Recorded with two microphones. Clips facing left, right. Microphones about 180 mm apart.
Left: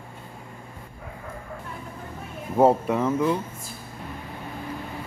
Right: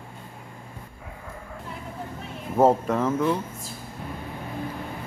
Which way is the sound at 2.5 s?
10° left (ahead or behind).